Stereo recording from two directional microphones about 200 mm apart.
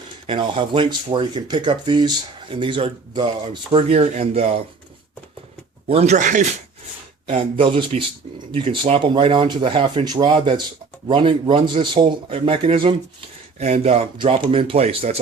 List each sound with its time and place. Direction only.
0.3 s speech: 25° right (ahead or behind)
5.9 s speech: 35° right (ahead or behind)
7.3 s speech: 30° right (ahead or behind)